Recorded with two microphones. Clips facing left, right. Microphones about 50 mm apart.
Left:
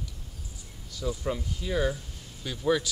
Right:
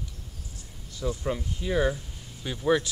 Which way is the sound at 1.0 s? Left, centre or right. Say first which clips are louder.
Right 1 dB; centre.